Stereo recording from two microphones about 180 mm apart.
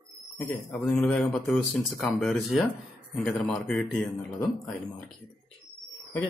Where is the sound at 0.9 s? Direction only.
Centre (ahead or behind).